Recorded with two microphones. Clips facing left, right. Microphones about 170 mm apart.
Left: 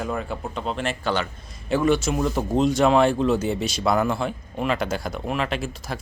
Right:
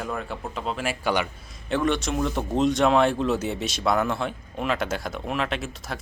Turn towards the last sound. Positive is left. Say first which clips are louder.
# left 2 dB
turn(degrees=0)  # may be behind; listen again after turning